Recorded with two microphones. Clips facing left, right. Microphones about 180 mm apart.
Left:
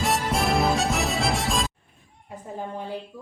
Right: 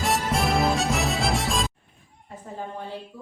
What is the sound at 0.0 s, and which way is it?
Music, centre (ahead or behind).